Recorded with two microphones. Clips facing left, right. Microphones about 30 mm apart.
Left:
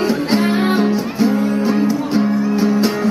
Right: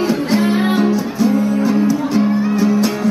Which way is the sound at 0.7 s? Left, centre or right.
Left.